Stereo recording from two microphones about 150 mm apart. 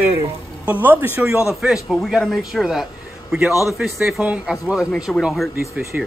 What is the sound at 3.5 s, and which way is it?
Speech, 20° left (ahead or behind).